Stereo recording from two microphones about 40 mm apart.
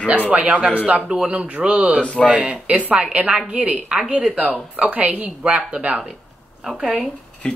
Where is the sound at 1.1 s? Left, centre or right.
Right.